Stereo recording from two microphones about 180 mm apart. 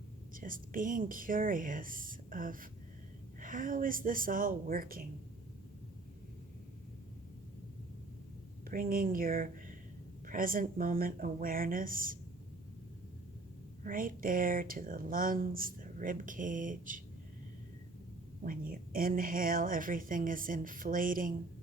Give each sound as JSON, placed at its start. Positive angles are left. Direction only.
{"t": 0.3, "sound": "speech", "side_deg": -50}
{"t": 8.6, "sound": "speech", "side_deg": -50}
{"t": 13.8, "sound": "speech", "side_deg": -50}
{"t": 18.4, "sound": "speech", "side_deg": -50}